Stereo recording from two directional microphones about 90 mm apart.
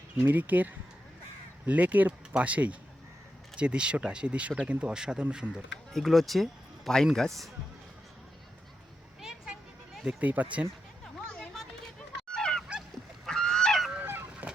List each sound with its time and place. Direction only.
0.3 s speech: 20° right (ahead or behind)
5.9 s speech: centre (ahead or behind)
9.2 s a sound: 5° right (ahead or behind)
10.2 s speech: 15° right (ahead or behind)
11.0 s a sound: 10° left (ahead or behind)
12.3 s goose: 10° left (ahead or behind)
13.9 s goose: 25° right (ahead or behind)